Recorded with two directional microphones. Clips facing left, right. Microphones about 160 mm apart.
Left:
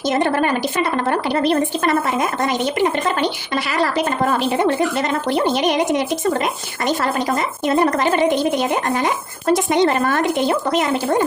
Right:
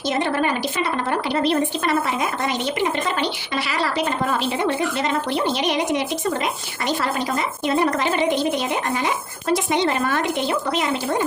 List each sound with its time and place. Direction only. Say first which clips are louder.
0.1 s speech: left 3 dB; 50° left (ahead or behind)
3.7 s speech: left 4 dB; 45° left (ahead or behind)